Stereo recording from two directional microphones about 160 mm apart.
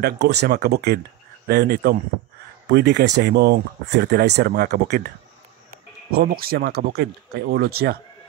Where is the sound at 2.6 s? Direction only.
90° right.